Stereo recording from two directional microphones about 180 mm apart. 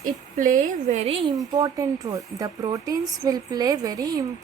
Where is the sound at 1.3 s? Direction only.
20° right (ahead or behind).